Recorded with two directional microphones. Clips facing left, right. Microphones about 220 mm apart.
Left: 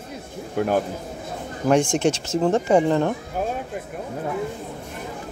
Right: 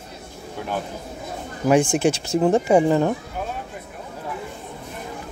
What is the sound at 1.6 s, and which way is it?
Speech, 5° right (ahead or behind).